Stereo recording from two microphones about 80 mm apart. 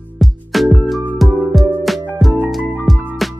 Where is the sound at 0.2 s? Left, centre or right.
Centre.